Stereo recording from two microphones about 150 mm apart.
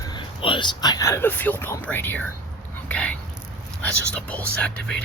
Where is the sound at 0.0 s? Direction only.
30° left (ahead or behind).